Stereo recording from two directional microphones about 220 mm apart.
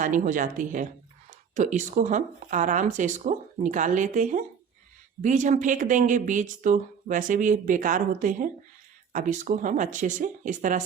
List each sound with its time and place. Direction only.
0.0 s speech: 35° right (ahead or behind)